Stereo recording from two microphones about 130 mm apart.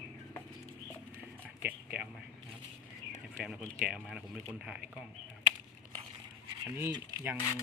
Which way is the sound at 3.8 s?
5° right (ahead or behind).